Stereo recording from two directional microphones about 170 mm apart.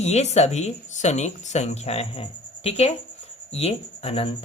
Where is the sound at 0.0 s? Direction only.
40° left (ahead or behind).